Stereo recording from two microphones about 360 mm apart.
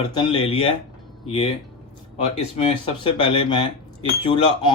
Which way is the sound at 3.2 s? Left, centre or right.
Centre.